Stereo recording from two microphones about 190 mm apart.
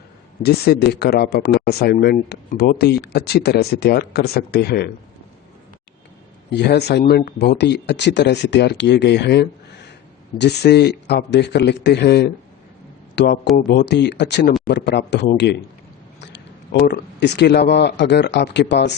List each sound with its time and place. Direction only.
0.4 s speech: 60° left (ahead or behind)
6.5 s speech: 60° left (ahead or behind)
16.8 s speech: 60° left (ahead or behind)